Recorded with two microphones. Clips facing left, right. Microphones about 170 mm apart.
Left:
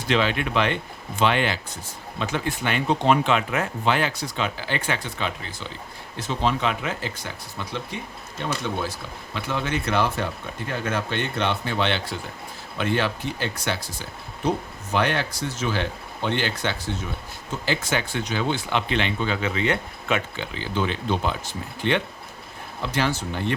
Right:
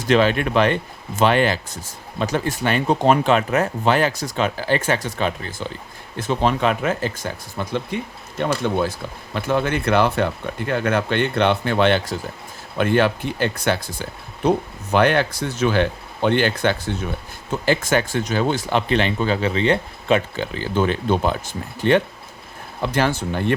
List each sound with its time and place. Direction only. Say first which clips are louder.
0.1 s speech: right 6 dB; 45° right (ahead or behind)
9.3 s speech: right 6 dB; 50° right (ahead or behind)